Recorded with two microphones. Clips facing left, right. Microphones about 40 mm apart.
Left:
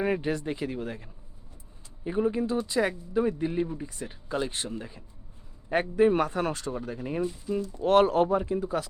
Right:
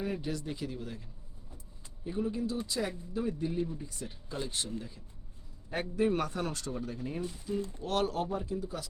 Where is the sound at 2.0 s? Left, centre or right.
Left.